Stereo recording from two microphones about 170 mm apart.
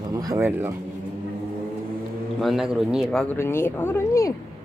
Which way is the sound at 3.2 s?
15° left (ahead or behind).